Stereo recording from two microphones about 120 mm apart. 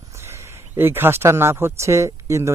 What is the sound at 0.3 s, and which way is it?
Speech, 20° right (ahead or behind).